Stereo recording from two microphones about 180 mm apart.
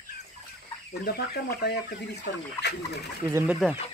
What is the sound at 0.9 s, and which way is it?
Speech, 60° left (ahead or behind).